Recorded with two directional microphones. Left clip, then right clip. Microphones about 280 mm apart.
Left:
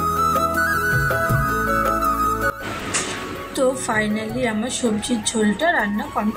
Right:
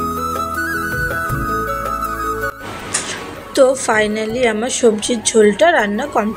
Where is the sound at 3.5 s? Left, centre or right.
Right.